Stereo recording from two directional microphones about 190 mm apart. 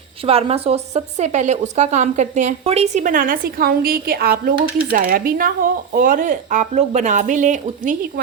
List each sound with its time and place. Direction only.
0.3 s a woman's voice: 30° right (ahead or behind)